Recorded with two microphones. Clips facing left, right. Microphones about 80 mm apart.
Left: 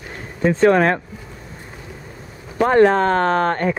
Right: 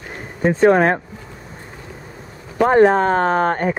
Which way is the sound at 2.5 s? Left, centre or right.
Centre.